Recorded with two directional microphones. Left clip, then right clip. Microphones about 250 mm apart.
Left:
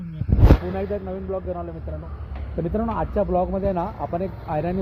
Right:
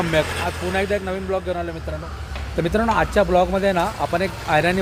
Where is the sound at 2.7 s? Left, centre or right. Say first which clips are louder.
Right 6 dB; right.